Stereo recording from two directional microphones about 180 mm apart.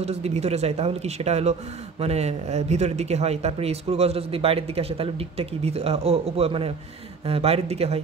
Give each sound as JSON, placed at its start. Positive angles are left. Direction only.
{"t": 0.0, "sound": "speech", "side_deg": -35}